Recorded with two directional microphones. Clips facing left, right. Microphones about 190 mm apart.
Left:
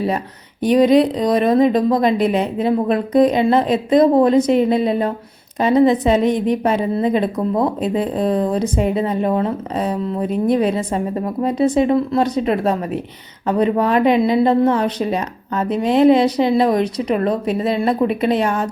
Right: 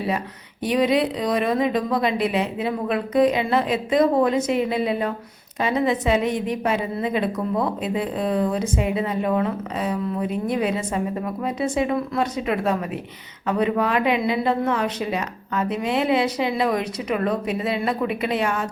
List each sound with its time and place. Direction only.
0.6 s speech: 40° left (ahead or behind)